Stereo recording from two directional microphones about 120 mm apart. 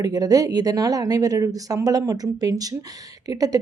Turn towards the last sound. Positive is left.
turn(degrees=-30)  # may be behind; listen again after turning